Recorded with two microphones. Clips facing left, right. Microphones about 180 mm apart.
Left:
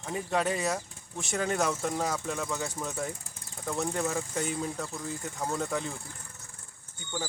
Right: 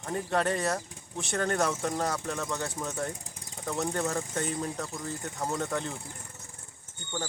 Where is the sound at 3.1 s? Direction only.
15° right (ahead or behind).